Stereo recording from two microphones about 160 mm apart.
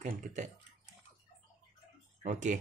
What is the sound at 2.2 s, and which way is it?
Speech, 50° right (ahead or behind).